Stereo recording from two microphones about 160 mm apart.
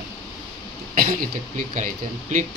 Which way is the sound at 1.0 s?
55° right (ahead or behind).